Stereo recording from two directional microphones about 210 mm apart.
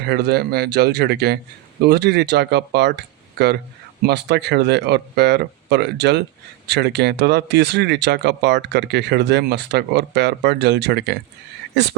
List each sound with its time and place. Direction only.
0.0 s speech: 50° right (ahead or behind)